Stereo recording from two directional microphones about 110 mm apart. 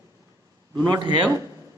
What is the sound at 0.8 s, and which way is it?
Speech, 40° right (ahead or behind).